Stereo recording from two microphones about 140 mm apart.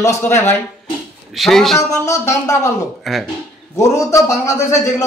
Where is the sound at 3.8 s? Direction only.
25° left (ahead or behind).